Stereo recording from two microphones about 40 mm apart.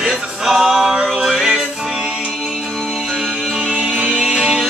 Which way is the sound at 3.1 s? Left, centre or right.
Centre.